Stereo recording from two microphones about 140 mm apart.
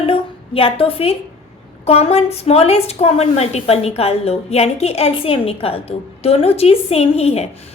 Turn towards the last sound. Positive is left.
turn(degrees=45)  # may be behind; listen again after turning